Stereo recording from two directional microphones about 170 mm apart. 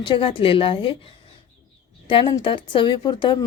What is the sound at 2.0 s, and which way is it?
A woman's voice, 30° left (ahead or behind).